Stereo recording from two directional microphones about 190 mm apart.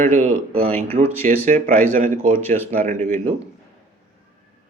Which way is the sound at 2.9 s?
45° right (ahead or behind).